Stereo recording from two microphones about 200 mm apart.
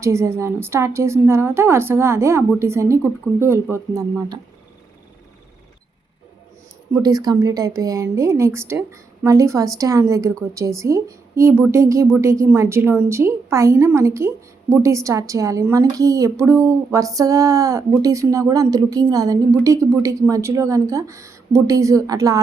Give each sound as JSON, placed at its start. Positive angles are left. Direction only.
{"t": 0.0, "sound": "a woman's voice", "side_deg": -15}
{"t": 6.9, "sound": "a woman's voice", "side_deg": -20}